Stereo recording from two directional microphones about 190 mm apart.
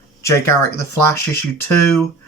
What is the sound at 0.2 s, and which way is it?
Speech, 15° left (ahead or behind).